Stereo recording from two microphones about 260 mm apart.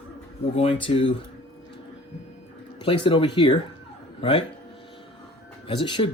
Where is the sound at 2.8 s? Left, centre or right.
Centre.